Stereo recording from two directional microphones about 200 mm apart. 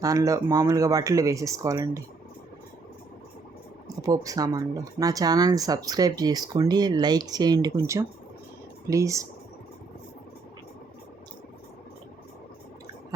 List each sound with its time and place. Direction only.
0.0 s speech: 15° right (ahead or behind)
4.0 s speech: 15° right (ahead or behind)